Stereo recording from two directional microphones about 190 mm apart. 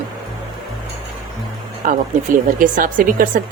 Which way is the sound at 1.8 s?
45° right (ahead or behind).